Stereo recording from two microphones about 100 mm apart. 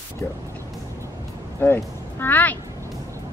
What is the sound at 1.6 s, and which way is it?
Speech, 20° left (ahead or behind).